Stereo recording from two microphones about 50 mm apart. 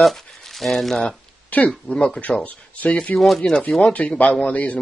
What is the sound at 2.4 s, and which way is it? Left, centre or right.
Speech, left.